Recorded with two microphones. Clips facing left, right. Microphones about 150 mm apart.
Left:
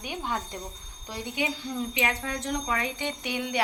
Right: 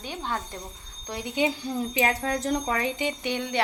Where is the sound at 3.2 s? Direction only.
10° left (ahead or behind).